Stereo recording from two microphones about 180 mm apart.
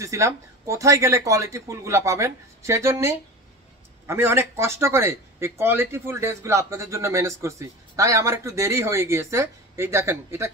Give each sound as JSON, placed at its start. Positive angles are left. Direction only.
{"t": 0.0, "sound": "speech", "side_deg": -15}